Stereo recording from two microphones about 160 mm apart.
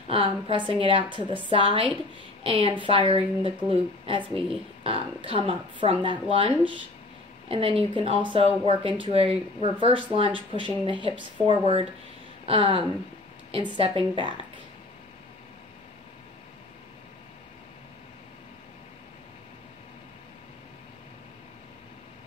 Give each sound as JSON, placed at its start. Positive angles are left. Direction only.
{"t": 0.1, "sound": "a woman's voice", "side_deg": -35}